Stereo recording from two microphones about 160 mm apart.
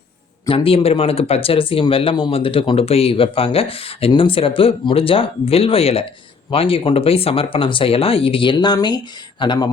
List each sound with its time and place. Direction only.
0.4 s speech: 35° left (ahead or behind)